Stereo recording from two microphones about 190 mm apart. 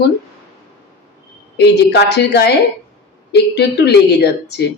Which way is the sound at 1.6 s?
60° left (ahead or behind).